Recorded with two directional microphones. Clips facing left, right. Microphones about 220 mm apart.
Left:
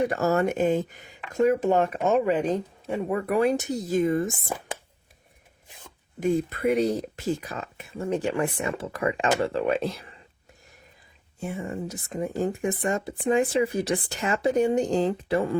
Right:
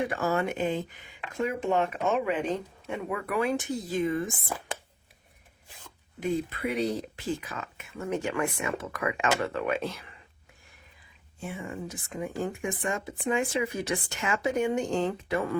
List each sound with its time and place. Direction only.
0.0 s speech: 40° left (ahead or behind)
6.1 s speech: 45° left (ahead or behind)
11.3 s speech: 40° left (ahead or behind)